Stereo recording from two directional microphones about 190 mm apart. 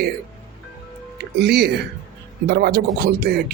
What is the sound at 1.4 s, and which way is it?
Speech, 60° right (ahead or behind).